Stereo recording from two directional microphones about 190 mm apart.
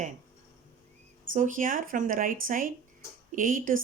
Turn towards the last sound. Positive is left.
turn(degrees=-45)  # may be behind; listen again after turning